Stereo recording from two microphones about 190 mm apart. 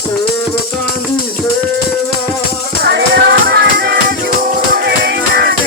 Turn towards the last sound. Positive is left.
turn(degrees=-60)  # may be behind; listen again after turning